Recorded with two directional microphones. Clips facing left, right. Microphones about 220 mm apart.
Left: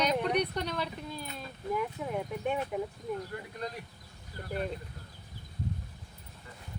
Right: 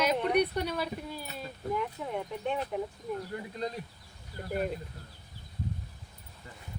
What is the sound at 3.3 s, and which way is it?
Speech, 25° right (ahead or behind).